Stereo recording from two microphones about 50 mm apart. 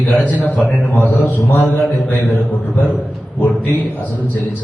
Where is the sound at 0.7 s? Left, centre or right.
Left.